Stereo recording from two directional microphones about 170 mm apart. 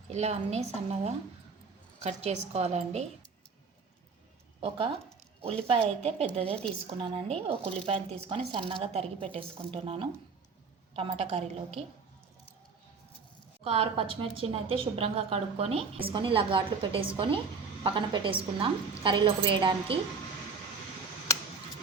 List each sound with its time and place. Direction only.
0.1 s a woman's voice: 40° right (ahead or behind)
4.6 s a woman's voice: 35° right (ahead or behind)
13.7 s a woman's voice: 35° right (ahead or behind)